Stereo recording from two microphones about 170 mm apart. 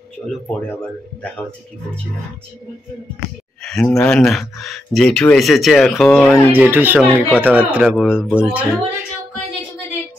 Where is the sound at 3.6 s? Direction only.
5° left (ahead or behind).